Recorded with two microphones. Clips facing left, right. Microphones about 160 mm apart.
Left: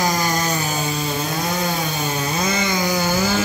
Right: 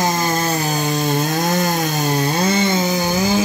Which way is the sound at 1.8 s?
40° right (ahead or behind).